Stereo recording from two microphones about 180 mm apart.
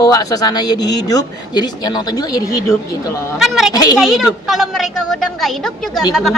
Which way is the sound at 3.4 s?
Centre (ahead or behind).